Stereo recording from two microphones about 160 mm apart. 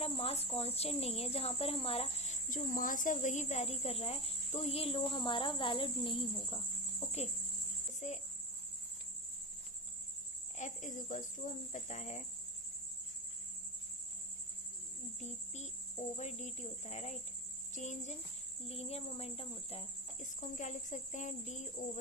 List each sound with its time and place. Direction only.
0.0 s speech: 40° left (ahead or behind)
7.9 s speech: 45° left (ahead or behind)
10.6 s speech: 50° left (ahead or behind)
15.2 s speech: 45° left (ahead or behind)
20.1 s speech: 50° left (ahead or behind)